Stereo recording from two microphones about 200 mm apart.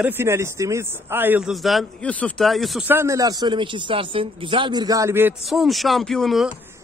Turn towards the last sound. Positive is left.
turn(degrees=0)  # may be behind; listen again after turning